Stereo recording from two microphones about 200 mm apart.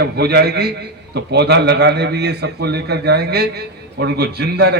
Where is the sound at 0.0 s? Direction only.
55° right (ahead or behind).